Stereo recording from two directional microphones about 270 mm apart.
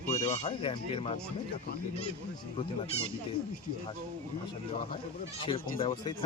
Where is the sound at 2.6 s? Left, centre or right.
Left.